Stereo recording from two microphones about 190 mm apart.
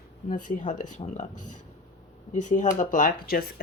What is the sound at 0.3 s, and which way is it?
Speech, 45° left (ahead or behind).